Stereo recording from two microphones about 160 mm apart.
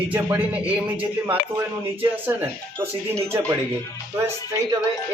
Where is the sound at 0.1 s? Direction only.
10° right (ahead or behind).